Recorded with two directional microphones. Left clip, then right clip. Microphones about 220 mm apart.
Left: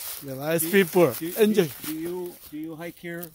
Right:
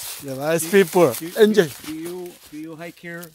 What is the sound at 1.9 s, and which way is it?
Speech, 35° left (ahead or behind).